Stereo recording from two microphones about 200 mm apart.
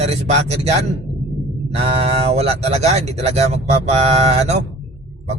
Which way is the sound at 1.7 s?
30° right (ahead or behind).